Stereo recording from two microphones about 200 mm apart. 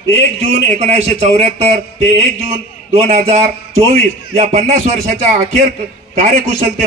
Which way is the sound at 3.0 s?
35° right (ahead or behind).